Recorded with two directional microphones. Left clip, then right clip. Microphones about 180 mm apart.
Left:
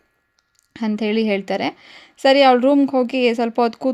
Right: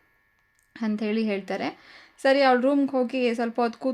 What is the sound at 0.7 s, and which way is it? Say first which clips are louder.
A woman's voice: left 7 dB; 30° left (ahead or behind).